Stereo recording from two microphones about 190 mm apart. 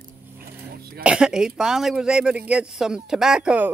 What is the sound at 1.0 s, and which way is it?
Speech, 5° right (ahead or behind).